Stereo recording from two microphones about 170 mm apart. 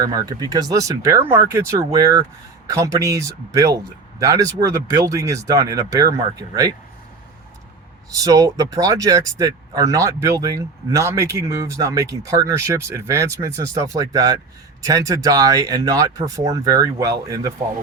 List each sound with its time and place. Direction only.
0.0 s speech: 25° right (ahead or behind)
8.1 s speech: 20° right (ahead or behind)